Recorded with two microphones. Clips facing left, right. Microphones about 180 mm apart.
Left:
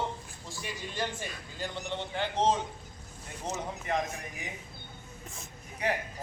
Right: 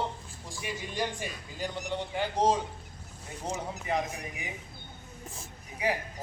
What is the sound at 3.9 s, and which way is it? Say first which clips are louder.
Speech: right 1 dB; 10° right (ahead or behind).